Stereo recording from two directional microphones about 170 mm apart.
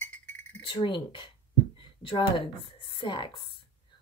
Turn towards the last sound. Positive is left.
turn(degrees=30)  # may be behind; listen again after turning